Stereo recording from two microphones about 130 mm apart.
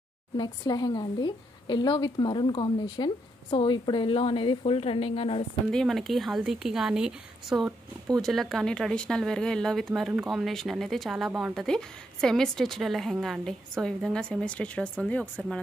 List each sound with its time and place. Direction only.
0.4 s a woman's voice: 30° left (ahead or behind)
5.7 s speech: 5° left (ahead or behind)